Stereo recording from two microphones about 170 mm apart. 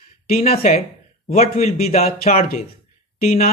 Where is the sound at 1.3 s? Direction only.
40° left (ahead or behind).